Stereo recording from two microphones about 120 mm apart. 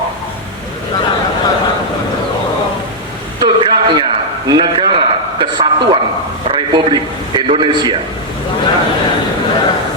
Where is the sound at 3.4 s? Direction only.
40° right (ahead or behind).